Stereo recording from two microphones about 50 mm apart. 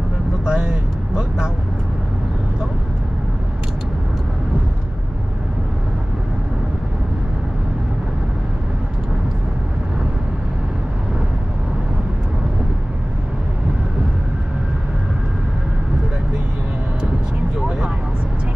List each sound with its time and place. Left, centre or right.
0.5 s vehicle: centre
17.6 s vehicle: centre